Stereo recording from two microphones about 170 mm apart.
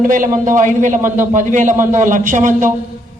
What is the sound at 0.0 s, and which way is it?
A man's voice, 50° right (ahead or behind).